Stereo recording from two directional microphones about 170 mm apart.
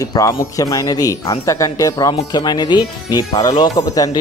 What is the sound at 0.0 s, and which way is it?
Speech, 20° left (ahead or behind).